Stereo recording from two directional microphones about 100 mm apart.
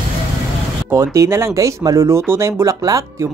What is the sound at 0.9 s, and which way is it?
Speech, 30° right (ahead or behind).